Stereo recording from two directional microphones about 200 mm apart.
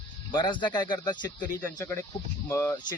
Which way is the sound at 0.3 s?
20° left (ahead or behind).